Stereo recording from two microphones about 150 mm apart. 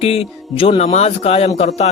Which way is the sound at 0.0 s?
40° left (ahead or behind).